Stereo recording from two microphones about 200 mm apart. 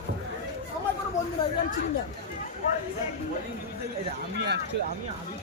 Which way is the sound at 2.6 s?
35° left (ahead or behind).